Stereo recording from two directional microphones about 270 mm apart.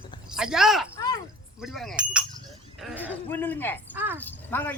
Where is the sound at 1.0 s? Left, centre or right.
Centre.